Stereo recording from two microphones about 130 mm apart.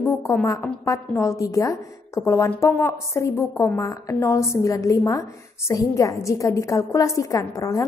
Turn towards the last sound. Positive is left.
turn(degrees=25)  # may be behind; listen again after turning